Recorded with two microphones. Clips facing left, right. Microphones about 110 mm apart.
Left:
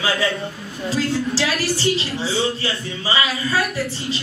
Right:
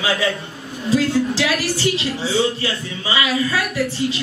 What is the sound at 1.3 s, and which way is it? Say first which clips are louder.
Speech: right 1 dB; 30° left (ahead or behind).